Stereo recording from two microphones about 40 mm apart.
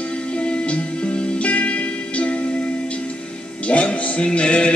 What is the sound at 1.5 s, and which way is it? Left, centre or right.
Music, left.